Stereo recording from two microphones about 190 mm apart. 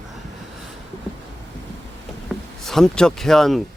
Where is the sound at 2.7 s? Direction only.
5° left (ahead or behind).